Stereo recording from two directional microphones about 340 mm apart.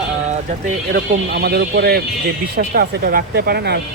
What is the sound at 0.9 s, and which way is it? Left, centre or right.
Speech, right.